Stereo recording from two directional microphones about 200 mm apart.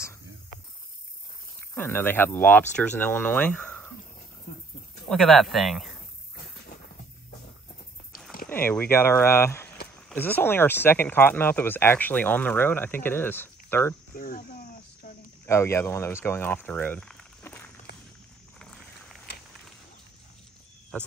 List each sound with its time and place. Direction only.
1.8 s speech: 10° left (ahead or behind)
5.0 s speech: centre (ahead or behind)
8.5 s speech: 10° left (ahead or behind)
14.1 s speech: 45° left (ahead or behind)
15.4 s speech: 15° left (ahead or behind)